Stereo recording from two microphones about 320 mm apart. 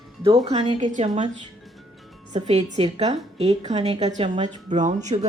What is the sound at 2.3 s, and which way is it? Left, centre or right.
A woman's voice, right.